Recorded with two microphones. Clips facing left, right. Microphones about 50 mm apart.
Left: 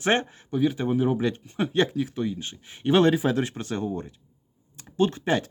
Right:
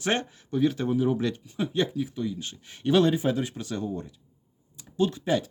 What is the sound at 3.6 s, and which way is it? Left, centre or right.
Speech, left.